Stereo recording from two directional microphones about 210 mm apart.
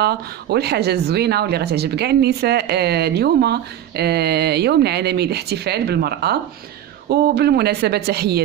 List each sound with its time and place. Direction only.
0.0 s speech: 50° right (ahead or behind)